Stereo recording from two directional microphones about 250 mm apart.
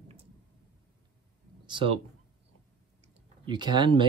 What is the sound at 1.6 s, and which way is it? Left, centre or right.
Speech, right.